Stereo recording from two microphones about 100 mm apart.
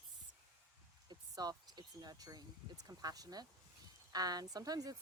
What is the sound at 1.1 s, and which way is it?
Speech, 40° right (ahead or behind).